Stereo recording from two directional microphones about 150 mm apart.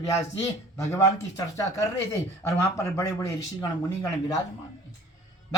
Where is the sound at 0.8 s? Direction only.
15° left (ahead or behind).